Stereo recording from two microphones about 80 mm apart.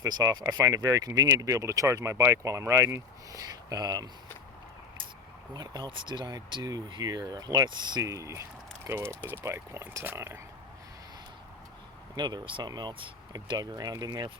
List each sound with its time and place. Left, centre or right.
0.0 s speech: right
5.5 s speech: right
8.0 s speech: right
12.1 s speech: right